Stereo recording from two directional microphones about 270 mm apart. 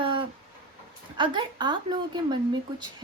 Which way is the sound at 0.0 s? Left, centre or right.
Centre.